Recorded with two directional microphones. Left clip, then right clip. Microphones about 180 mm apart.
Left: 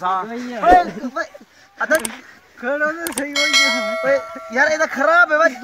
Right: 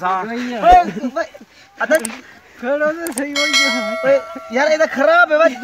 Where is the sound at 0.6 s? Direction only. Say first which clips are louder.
Right 2 dB; 20° right (ahead or behind).